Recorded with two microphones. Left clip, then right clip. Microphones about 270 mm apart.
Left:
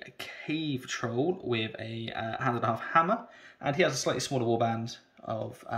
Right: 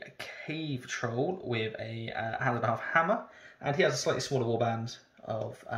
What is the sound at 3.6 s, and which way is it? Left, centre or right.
Speech, centre.